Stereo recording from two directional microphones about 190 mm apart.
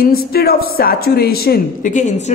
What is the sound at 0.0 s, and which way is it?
A woman's voice, 55° left (ahead or behind).